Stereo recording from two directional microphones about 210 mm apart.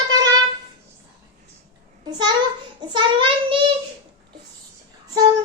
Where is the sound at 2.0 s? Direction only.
20° right (ahead or behind).